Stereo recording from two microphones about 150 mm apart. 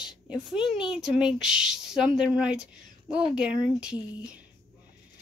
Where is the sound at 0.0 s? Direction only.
5° right (ahead or behind).